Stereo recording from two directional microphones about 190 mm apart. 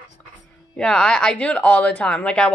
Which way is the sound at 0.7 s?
5° left (ahead or behind).